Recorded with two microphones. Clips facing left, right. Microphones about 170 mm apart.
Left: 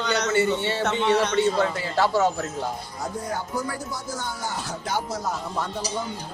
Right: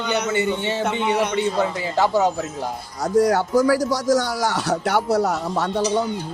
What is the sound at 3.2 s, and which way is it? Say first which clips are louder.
Speech: right 13 dB; 75° right (ahead or behind).